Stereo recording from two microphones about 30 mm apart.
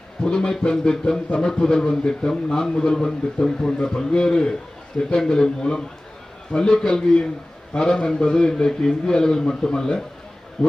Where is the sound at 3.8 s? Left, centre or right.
Left.